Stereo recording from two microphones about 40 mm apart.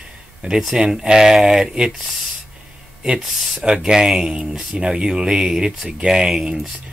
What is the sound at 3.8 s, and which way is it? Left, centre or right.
Speech, centre.